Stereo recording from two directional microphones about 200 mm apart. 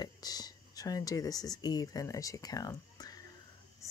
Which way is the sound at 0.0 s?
20° left (ahead or behind).